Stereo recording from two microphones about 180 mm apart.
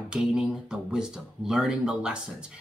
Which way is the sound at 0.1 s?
5° right (ahead or behind).